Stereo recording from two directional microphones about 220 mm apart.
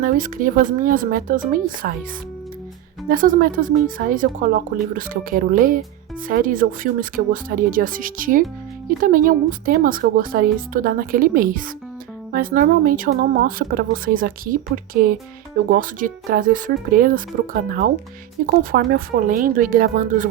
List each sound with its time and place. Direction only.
0.0 s speech: 40° right (ahead or behind)
3.1 s speech: 40° right (ahead or behind)